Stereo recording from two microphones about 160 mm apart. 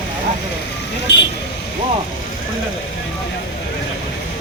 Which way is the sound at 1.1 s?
90° left.